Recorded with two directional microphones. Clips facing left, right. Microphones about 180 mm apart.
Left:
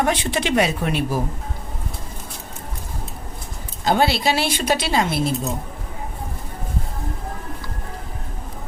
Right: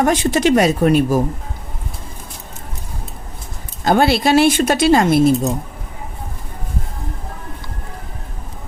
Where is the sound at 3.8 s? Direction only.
50° right (ahead or behind).